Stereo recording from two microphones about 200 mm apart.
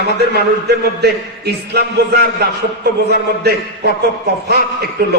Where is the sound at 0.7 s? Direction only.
55° right (ahead or behind).